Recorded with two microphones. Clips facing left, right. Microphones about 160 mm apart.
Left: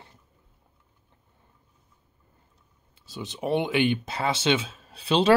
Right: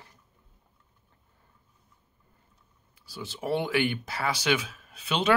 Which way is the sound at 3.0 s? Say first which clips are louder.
Left 4 dB; 20° left (ahead or behind).